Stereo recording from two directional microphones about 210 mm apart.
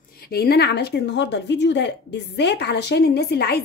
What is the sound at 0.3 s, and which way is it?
A woman's voice, 50° left (ahead or behind).